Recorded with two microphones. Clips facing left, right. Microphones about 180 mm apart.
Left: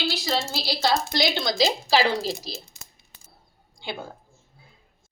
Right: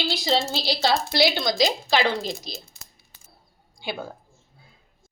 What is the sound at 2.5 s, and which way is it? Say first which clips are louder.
Speech: left 1 dB; 35° left (ahead or behind).